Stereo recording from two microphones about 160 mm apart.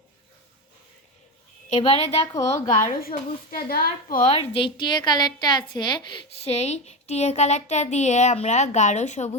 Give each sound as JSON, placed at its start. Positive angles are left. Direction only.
{"t": 1.8, "sound": "a woman's voice", "side_deg": 40}
{"t": 2.2, "sound": "a woman's voice", "side_deg": 20}
{"t": 2.7, "sound": "a woman's voice", "side_deg": 60}
{"t": 4.3, "sound": "a woman's voice", "side_deg": 35}